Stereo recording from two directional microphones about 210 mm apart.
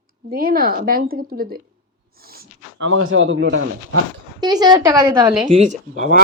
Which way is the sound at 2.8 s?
65° right (ahead or behind).